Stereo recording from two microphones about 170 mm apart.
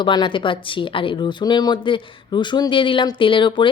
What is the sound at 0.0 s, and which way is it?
Speech, 25° left (ahead or behind).